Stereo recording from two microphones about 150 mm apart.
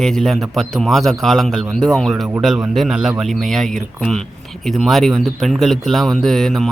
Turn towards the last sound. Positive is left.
turn(degrees=5)  # may be behind; listen again after turning